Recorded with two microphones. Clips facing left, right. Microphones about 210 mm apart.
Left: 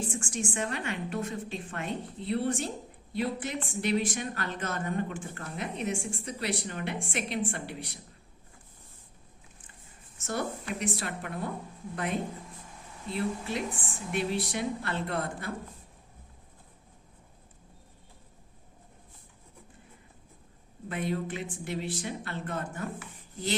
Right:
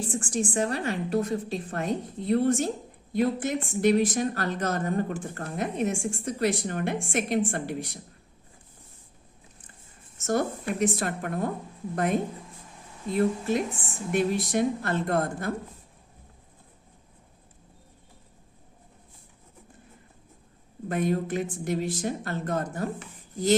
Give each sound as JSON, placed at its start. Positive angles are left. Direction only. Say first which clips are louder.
{"t": 0.1, "sound": "a woman's voice", "louder": "right 6 dB", "side_deg": -35}
{"t": 10.2, "sound": "speech", "louder": "right 7 dB", "side_deg": -45}
{"t": 13.1, "sound": "speech", "louder": "right 7 dB", "side_deg": -45}
{"t": 20.9, "sound": "speech", "louder": "right 6 dB", "side_deg": -45}